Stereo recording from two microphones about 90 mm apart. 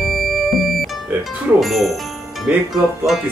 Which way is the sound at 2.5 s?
20° right (ahead or behind).